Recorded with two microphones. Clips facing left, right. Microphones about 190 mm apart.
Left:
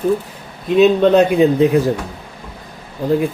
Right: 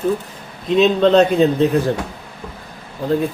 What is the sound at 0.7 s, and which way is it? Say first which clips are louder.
Speech: left 2 dB; 5° left (ahead or behind).